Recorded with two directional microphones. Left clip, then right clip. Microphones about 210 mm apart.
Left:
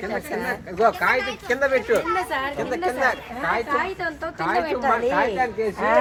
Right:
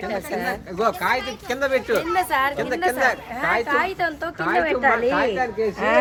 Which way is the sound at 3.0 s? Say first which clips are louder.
Right 2 dB; 35° right (ahead or behind).